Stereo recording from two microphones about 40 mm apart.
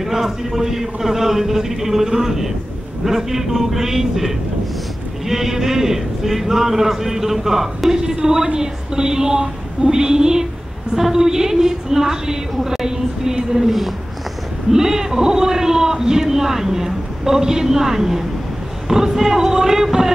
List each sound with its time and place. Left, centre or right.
0.0 s speech: centre